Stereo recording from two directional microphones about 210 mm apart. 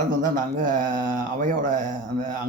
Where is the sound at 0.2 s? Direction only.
40° right (ahead or behind).